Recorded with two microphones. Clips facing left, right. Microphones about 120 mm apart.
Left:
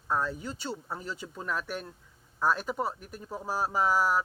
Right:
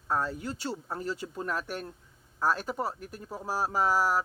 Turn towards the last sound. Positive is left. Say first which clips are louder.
# even
turn(degrees=0)  # may be behind; listen again after turning